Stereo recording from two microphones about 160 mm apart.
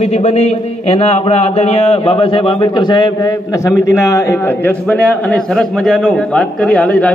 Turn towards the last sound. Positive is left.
turn(degrees=5)  # may be behind; listen again after turning